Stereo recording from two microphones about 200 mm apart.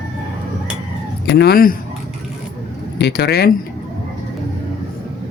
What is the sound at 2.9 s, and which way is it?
Speech, 55° left (ahead or behind).